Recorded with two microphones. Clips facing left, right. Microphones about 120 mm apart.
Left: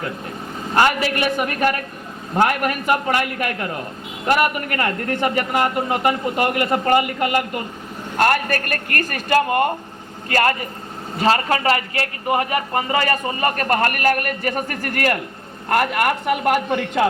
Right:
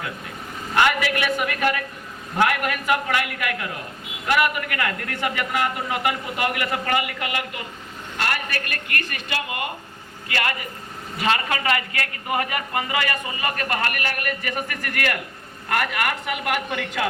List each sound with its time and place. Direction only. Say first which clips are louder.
0.7 s a man's voice: left 3 dB; 35° left (ahead or behind)